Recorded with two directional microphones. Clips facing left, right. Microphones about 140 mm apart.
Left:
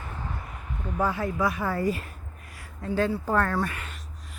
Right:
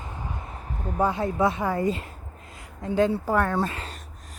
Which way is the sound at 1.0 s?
20° right (ahead or behind).